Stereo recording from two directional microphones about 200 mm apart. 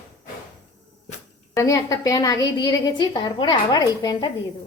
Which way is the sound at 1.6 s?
15° left (ahead or behind).